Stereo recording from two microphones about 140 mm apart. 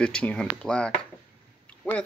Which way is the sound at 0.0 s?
10° left (ahead or behind).